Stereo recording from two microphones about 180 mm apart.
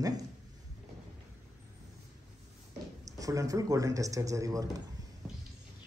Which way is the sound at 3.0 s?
20° right (ahead or behind).